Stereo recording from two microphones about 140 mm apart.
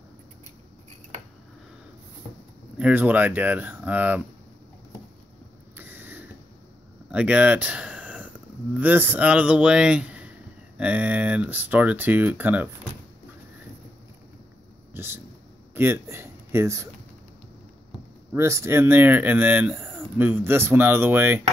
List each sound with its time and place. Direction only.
2.8 s speech: 10° right (ahead or behind)
5.8 s a sound: 15° right (ahead or behind)
8.7 s speech: 15° right (ahead or behind)
15.0 s a man's voice: 15° right (ahead or behind)
18.3 s speech: 20° right (ahead or behind)